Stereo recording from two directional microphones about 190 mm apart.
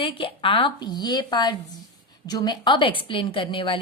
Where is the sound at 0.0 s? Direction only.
30° left (ahead or behind).